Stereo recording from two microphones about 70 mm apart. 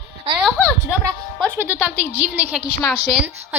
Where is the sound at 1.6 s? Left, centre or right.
Right.